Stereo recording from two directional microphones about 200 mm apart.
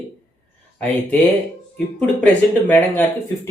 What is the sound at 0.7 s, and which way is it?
Speech, 5° left (ahead or behind).